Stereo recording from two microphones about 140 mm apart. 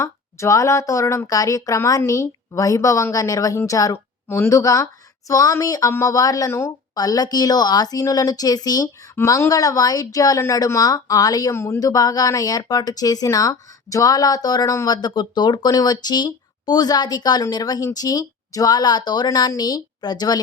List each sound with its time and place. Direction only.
0.0 s speech: 20° left (ahead or behind)